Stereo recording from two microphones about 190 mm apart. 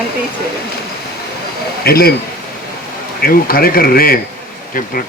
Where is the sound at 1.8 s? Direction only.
55° left (ahead or behind).